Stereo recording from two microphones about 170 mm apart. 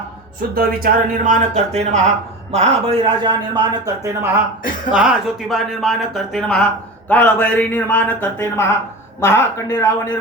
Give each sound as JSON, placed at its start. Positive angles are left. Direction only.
{"t": 0.5, "sound": "a man's voice", "side_deg": -60}
{"t": 4.9, "sound": "a man's voice", "side_deg": -5}